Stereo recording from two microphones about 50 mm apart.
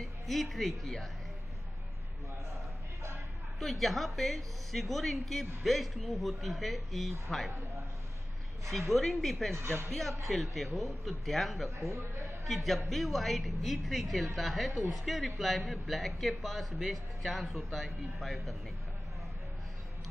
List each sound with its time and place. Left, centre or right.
0.0 s speech: centre
2.5 s a sound: right
3.5 s a woman's voice: centre
8.9 s a woman's voice: centre
9.6 s speech: right
9.8 s a woman's voice: centre
11.9 s a man's voice: right
12.4 s a woman's voice: centre